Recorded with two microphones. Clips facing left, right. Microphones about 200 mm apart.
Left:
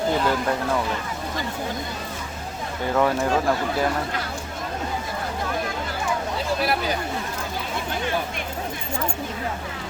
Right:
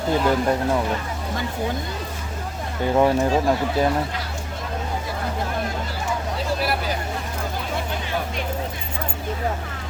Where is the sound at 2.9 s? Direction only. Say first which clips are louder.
Right 3 dB; 20° right (ahead or behind).